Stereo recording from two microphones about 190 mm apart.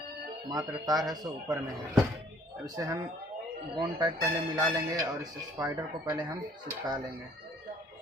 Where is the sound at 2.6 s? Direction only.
20° right (ahead or behind).